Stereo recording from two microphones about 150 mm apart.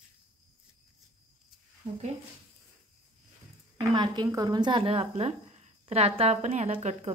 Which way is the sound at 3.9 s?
30° right (ahead or behind).